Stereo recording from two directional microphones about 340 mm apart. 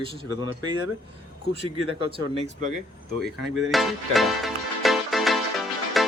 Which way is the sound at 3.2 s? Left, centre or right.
Centre.